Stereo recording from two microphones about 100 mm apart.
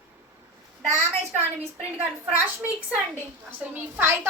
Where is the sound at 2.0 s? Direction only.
20° right (ahead or behind).